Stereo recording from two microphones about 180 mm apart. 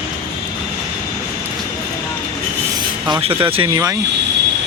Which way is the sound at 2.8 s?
25° right (ahead or behind).